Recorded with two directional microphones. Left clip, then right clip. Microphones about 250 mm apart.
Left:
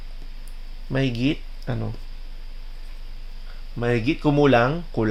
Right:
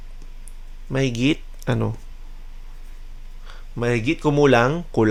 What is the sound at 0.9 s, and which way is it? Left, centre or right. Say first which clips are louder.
Speech: right 3 dB; centre.